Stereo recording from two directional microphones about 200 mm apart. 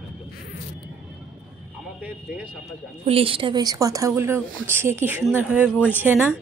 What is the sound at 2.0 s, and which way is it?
Speech, 5° right (ahead or behind).